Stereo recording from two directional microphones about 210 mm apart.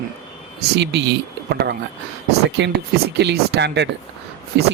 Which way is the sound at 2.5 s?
55° right (ahead or behind).